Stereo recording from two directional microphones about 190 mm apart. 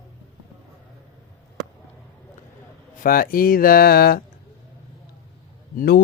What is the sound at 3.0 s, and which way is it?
Mantra, 50° left (ahead or behind).